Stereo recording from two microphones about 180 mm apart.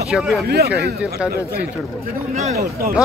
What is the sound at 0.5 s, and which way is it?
Speech, 60° right (ahead or behind).